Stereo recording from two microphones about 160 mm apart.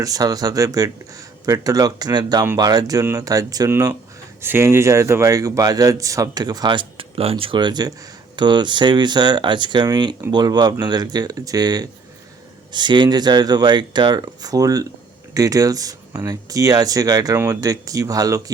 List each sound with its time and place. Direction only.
0.0 s a man's voice: 25° right (ahead or behind)